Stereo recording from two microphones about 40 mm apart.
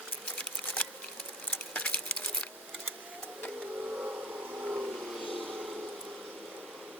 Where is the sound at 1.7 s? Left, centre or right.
Left.